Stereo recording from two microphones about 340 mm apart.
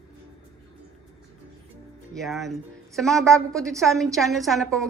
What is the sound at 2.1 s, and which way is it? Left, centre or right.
A woman's voice, centre.